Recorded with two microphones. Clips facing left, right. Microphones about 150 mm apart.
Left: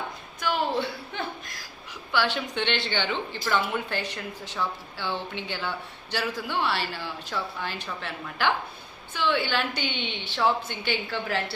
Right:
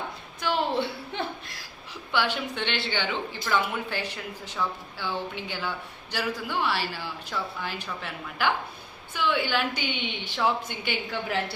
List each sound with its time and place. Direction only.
0.3 s a sound: 30° right (ahead or behind)
2.1 s a woman's voice: 10° right (ahead or behind)
5.5 s a woman's voice: 10° right (ahead or behind)